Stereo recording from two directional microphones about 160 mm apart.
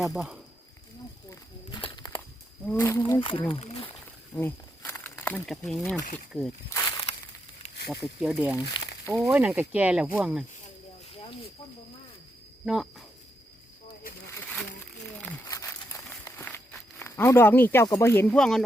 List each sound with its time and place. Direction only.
0.0 s speech: centre (ahead or behind)
1.3 s walk: 25° left (ahead or behind)
2.6 s speech: 15° left (ahead or behind)
3.0 s speech: 30° left (ahead or behind)
4.4 s snake: 15° left (ahead or behind)
6.7 s a sound: 20° left (ahead or behind)
7.9 s speech: centre (ahead or behind)
12.6 s speech: centre (ahead or behind)
15.4 s a sound: 20° left (ahead or behind)
17.0 s speech: 15° left (ahead or behind)